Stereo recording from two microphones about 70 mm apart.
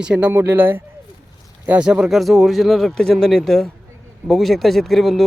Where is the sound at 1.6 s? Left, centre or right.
Centre.